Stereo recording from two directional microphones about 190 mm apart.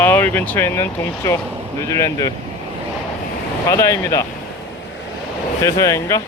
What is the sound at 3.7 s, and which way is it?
Speech, 15° left (ahead or behind).